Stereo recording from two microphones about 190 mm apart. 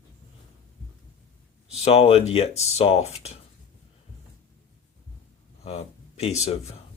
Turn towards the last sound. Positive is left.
turn(degrees=35)  # may be behind; listen again after turning